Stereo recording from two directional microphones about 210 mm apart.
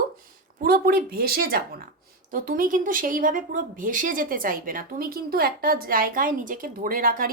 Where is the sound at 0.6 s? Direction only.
45° right (ahead or behind).